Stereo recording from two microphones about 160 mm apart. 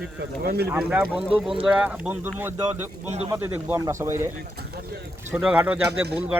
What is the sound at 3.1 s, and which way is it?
Speech, 40° right (ahead or behind).